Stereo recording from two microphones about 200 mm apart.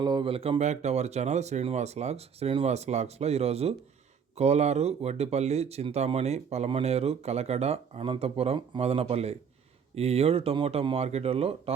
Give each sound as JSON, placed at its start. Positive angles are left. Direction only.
{"t": 0.0, "sound": "speech", "side_deg": -20}